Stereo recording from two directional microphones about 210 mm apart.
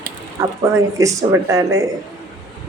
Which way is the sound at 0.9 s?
15° right (ahead or behind).